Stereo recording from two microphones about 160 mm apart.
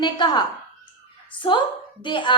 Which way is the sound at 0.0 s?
30° left (ahead or behind).